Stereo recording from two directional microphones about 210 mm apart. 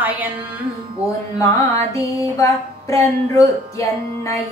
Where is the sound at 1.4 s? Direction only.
15° left (ahead or behind).